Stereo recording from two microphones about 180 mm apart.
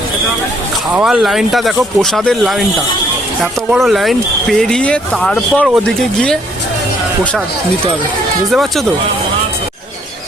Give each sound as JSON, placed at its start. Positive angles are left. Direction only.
{"t": 0.9, "sound": "speech", "side_deg": -5}
{"t": 8.4, "sound": "speech", "side_deg": 0}